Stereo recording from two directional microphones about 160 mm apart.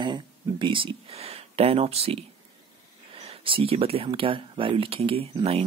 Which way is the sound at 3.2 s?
35° right (ahead or behind).